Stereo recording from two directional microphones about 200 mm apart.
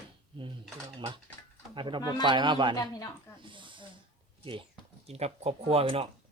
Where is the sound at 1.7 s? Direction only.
25° right (ahead or behind).